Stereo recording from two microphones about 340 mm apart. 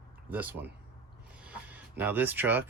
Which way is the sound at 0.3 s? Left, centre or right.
Centre.